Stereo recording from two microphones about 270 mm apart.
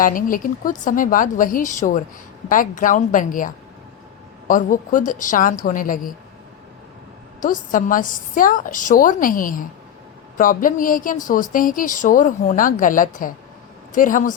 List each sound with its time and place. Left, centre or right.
0.0 s a woman's voice: left
7.4 s a woman's voice: left